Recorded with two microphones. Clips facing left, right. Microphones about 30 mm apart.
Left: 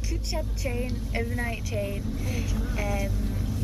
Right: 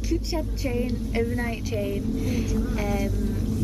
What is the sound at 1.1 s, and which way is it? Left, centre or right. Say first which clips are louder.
Speech: right 4 dB; centre.